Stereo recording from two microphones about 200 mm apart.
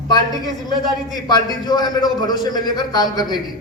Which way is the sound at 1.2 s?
20° left (ahead or behind).